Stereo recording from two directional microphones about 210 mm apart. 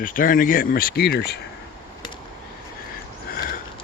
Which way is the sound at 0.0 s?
40° left (ahead or behind).